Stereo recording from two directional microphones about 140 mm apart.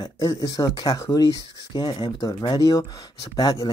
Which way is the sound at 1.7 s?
30° left (ahead or behind).